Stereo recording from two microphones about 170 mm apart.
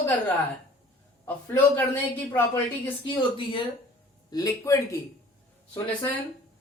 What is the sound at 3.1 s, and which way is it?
Speech, 30° left (ahead or behind).